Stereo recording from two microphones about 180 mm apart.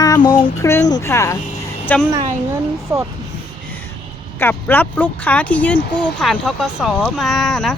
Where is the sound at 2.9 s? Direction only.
10° right (ahead or behind).